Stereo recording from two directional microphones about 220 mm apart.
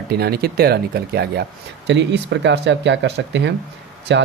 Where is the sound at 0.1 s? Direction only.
45° right (ahead or behind).